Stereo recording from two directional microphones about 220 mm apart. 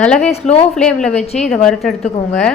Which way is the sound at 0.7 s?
5° left (ahead or behind).